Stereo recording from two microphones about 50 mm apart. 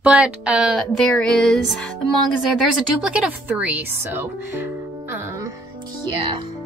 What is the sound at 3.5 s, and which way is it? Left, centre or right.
A woman's voice, right.